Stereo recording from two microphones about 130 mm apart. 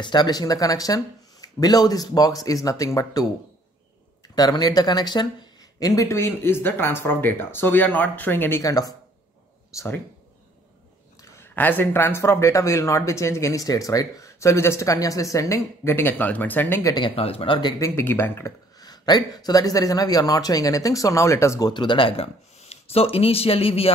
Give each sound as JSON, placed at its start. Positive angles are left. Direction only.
{"t": 0.0, "sound": "speech", "side_deg": 35}
{"t": 4.4, "sound": "speech", "side_deg": 30}
{"t": 11.3, "sound": "speech", "side_deg": 15}
{"t": 17.1, "sound": "speech", "side_deg": 50}
{"t": 17.6, "sound": "speech", "side_deg": 30}
{"t": 18.8, "sound": "speech", "side_deg": 30}